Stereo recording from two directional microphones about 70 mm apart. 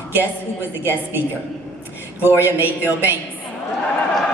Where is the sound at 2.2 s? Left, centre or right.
Right.